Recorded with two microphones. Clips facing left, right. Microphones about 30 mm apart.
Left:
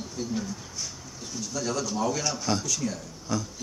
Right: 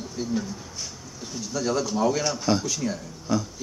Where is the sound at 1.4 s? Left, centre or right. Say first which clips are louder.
Right 4 dB; centre.